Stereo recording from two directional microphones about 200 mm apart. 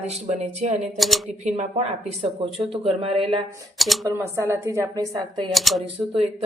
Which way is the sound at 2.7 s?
30° right (ahead or behind).